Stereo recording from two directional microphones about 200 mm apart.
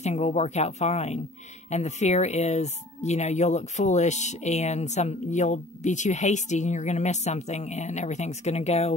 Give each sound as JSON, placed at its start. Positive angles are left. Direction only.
{"t": 0.0, "sound": "speech", "side_deg": 35}